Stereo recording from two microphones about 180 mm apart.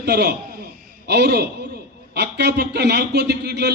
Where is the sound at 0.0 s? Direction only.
65° right (ahead or behind).